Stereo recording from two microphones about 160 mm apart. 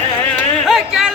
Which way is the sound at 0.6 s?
Centre (ahead or behind).